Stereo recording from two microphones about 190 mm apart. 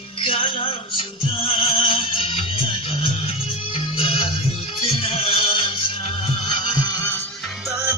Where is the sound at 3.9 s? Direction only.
30° left (ahead or behind).